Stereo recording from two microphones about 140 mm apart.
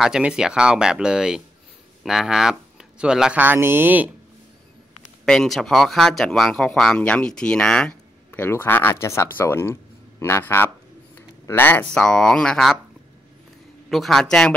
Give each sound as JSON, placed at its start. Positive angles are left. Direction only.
{"t": 0.0, "sound": "speech", "side_deg": -5}
{"t": 5.2, "sound": "speech", "side_deg": 5}
{"t": 13.8, "sound": "speech", "side_deg": 0}